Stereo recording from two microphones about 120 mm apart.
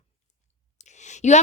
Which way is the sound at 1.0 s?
75° left (ahead or behind).